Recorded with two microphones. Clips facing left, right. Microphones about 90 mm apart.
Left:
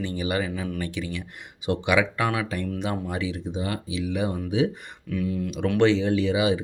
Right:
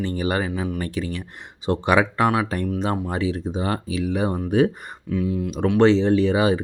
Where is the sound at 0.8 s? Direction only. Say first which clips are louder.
Right 3 dB; 40° right (ahead or behind).